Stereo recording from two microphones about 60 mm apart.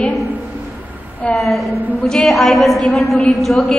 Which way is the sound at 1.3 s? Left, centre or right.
Centre.